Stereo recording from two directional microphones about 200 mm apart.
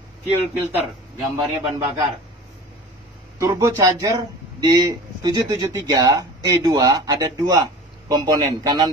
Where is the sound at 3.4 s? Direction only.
15° right (ahead or behind).